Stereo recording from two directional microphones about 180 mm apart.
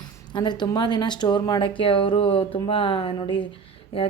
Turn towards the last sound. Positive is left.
turn(degrees=30)  # may be behind; listen again after turning